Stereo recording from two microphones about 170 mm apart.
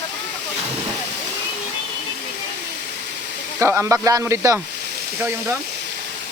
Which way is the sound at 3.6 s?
15° right (ahead or behind).